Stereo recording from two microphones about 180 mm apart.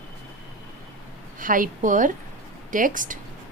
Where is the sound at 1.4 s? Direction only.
50° right (ahead or behind).